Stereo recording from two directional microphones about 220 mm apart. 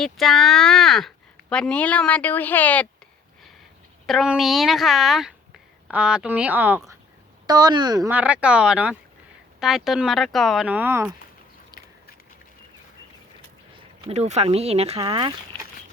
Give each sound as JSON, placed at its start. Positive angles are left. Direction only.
{"t": 0.0, "sound": "speech", "side_deg": 0}
{"t": 4.0, "sound": "speech", "side_deg": 0}
{"t": 13.7, "sound": "speech", "side_deg": -30}